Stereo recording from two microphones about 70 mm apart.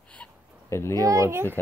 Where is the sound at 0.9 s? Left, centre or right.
Right.